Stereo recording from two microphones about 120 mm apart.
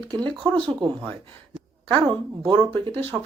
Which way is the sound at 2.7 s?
15° left (ahead or behind).